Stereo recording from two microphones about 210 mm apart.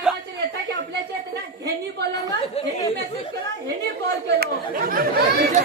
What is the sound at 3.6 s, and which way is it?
Chatter, 50° right (ahead or behind).